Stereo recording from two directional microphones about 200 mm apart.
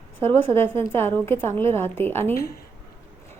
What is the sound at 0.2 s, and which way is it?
A woman's voice, 10° left (ahead or behind).